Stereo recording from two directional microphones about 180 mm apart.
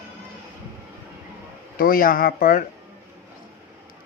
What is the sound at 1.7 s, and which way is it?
Speech, 50° left (ahead or behind).